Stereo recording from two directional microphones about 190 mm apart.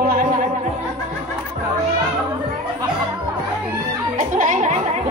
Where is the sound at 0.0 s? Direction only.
45° right (ahead or behind).